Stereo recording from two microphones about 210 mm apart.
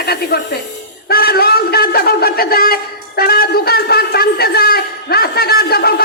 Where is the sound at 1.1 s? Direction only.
45° left (ahead or behind).